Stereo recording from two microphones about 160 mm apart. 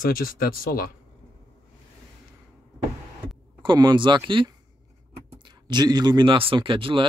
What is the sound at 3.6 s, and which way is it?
A man's voice, 25° right (ahead or behind).